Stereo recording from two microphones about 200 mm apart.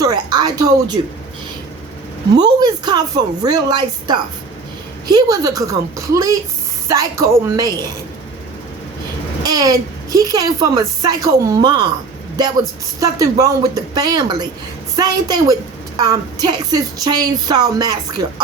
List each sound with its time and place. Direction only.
0.0 s speech: 20° right (ahead or behind)
2.3 s a woman's voice: 20° right (ahead or behind)
9.4 s a woman's voice: 20° right (ahead or behind)
13.0 s speech: 15° right (ahead or behind)